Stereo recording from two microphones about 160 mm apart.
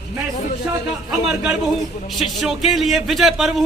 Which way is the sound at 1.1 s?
5° right (ahead or behind).